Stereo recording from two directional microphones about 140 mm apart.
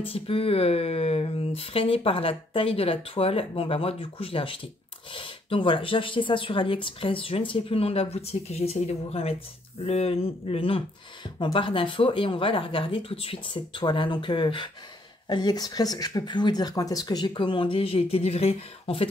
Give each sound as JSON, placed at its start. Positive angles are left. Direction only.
{"t": 0.0, "sound": "speech", "side_deg": 40}